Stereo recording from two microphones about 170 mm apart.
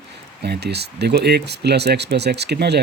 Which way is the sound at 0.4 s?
75° right (ahead or behind).